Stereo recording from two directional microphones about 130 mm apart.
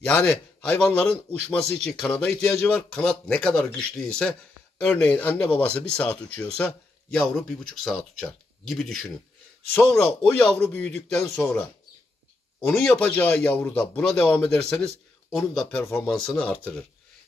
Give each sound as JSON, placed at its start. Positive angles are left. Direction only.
{"t": 0.0, "sound": "a man's voice", "side_deg": 10}
{"t": 15.8, "sound": "speech", "side_deg": 20}
{"t": 16.1, "sound": "speech", "side_deg": 5}